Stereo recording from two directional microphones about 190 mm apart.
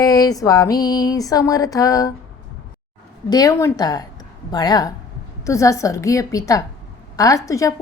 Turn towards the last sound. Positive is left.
turn(degrees=15)  # may be behind; listen again after turning